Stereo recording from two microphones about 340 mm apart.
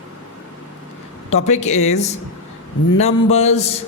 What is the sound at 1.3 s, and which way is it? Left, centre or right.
Speech, centre.